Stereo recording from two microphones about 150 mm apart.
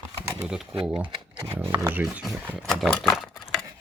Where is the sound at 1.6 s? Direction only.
15° right (ahead or behind).